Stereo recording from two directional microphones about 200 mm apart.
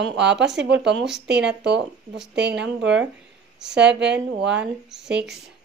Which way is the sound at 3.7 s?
60° right (ahead or behind).